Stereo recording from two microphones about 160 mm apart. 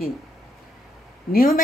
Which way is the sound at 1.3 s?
65° left (ahead or behind).